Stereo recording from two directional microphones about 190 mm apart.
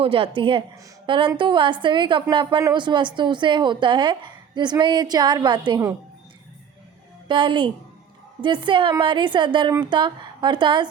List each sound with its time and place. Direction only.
0.0 s a woman's voice: 30° right (ahead or behind)
7.3 s a woman's voice: 25° right (ahead or behind)